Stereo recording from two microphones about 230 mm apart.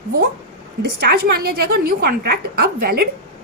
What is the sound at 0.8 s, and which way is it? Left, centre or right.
A woman's voice, right.